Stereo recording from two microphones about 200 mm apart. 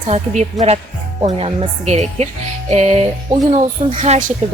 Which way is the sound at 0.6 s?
Centre (ahead or behind).